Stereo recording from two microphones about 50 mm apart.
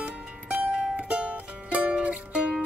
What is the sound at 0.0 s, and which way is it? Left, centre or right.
Music, right.